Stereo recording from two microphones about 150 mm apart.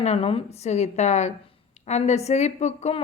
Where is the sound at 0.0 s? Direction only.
45° left (ahead or behind).